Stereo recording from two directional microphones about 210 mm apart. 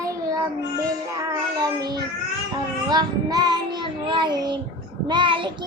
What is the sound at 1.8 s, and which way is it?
Child singing, 20° right (ahead or behind).